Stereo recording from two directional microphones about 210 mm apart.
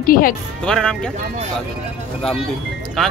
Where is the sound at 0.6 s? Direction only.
5° left (ahead or behind).